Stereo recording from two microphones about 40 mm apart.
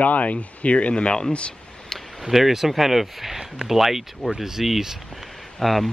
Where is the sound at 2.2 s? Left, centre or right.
Centre.